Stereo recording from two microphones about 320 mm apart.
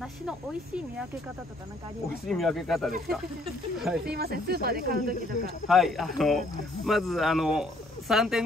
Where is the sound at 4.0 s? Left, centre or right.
Right.